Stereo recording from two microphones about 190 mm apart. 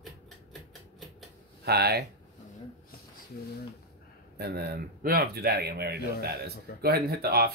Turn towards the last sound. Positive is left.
turn(degrees=-55)  # may be behind; listen again after turning